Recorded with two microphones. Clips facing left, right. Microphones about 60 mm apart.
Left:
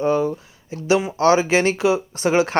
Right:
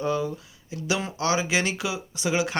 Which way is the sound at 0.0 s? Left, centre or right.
Left.